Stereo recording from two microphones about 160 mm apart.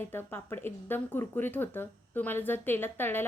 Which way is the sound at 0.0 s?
15° left (ahead or behind).